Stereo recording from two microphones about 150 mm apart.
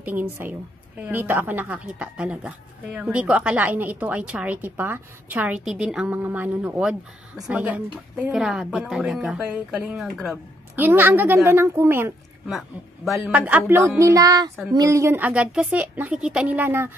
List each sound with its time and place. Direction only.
0.0 s a woman's voice: 10° right (ahead or behind)
12.4 s a woman's voice: centre (ahead or behind)